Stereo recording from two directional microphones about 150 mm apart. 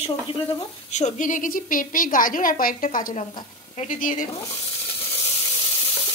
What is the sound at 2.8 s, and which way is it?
Speech, 50° left (ahead or behind).